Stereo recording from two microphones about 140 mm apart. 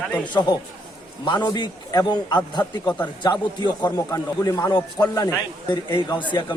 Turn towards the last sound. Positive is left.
turn(degrees=35)  # may be behind; listen again after turning